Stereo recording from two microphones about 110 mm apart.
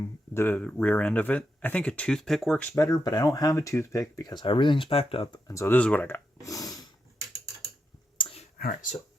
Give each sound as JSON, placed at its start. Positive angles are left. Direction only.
{"t": 0.0, "sound": "speech", "side_deg": 20}
{"t": 2.7, "sound": "speech", "side_deg": 35}
{"t": 5.5, "sound": "speech", "side_deg": 25}
{"t": 5.7, "sound": "speech", "side_deg": 15}
{"t": 6.4, "sound": "a sound", "side_deg": 35}
{"t": 8.2, "sound": "whispering", "side_deg": 60}